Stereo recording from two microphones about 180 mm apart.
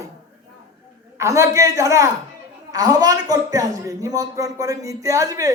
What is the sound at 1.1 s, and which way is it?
A man's voice, 15° right (ahead or behind).